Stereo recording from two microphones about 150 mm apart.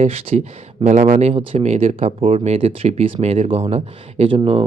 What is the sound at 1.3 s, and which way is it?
Speech, 40° right (ahead or behind).